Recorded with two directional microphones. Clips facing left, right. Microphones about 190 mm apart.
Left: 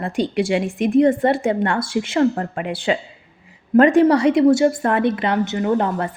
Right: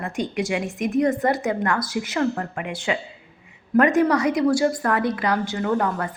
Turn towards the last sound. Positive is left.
turn(degrees=25)  # may be behind; listen again after turning